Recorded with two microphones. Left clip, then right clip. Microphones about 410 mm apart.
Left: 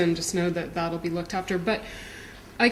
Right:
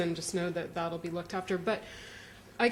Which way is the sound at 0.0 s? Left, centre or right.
Right.